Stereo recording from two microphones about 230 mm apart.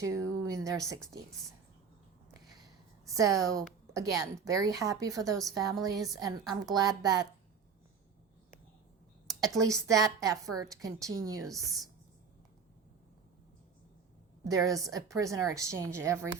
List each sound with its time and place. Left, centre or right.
0.0 s a woman's voice: centre
3.2 s a woman's voice: centre
9.2 s a woman's voice: centre
11.5 s speech: centre
14.4 s a woman's voice: centre